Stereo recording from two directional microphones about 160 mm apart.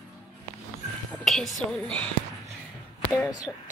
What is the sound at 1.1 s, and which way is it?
Speech, centre (ahead or behind).